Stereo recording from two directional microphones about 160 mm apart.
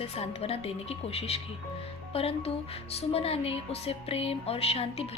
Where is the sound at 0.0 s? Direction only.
40° left (ahead or behind).